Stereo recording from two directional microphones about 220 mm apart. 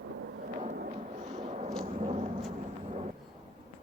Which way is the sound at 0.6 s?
35° right (ahead or behind).